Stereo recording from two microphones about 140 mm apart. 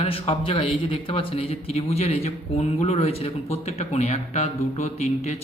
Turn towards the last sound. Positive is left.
turn(degrees=50)  # may be behind; listen again after turning